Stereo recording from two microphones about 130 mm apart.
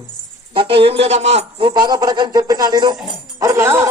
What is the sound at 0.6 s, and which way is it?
Speech, 45° right (ahead or behind).